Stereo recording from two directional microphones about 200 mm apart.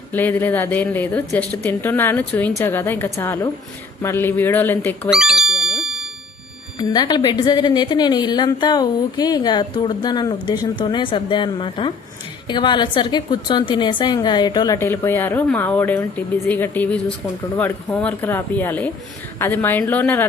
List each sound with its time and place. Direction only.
0.1 s a woman's voice: 10° left (ahead or behind)
5.1 s music: 5° right (ahead or behind)
6.7 s a woman's voice: 20° left (ahead or behind)